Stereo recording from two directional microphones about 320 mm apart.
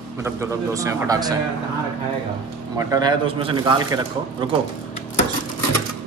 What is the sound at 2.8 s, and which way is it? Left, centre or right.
A man's voice, centre.